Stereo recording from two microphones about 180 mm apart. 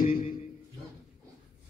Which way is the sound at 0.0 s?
50° left (ahead or behind).